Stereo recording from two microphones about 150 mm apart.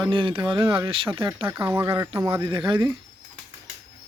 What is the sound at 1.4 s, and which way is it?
Speech, 15° right (ahead or behind).